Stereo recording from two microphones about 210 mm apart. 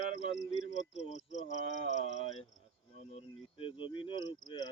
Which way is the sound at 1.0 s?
30° left (ahead or behind).